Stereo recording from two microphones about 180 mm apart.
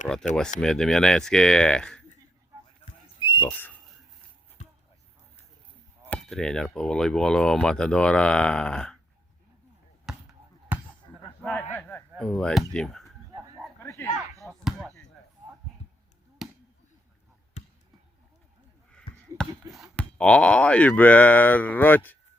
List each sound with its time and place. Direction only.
0.6 s speech: 5° left (ahead or behind)
3.2 s whistle: 25° left (ahead or behind)
3.5 s whistle: 10° left (ahead or behind)
6.1 s speech: 5° left (ahead or behind)
10.1 s basketball bounce: 5° right (ahead or behind)
11.4 s a sound: 5° left (ahead or behind)
12.7 s speech: 5° left (ahead or behind)
13.8 s dog: 15° left (ahead or behind)
14.4 s basketball bounce: centre (ahead or behind)
18.9 s a sound: 5° left (ahead or behind)
19.7 s speech: centre (ahead or behind)